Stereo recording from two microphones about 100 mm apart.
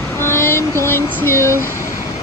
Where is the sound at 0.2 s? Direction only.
25° left (ahead or behind).